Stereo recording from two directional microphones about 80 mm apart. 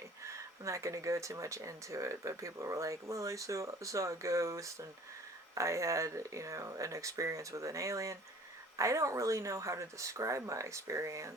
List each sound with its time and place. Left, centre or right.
0.3 s speech: right